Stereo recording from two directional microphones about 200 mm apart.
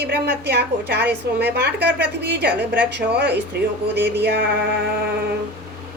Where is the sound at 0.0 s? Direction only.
55° right (ahead or behind).